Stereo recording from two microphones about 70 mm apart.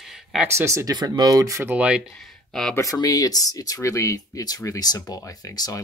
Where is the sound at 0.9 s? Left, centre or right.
Right.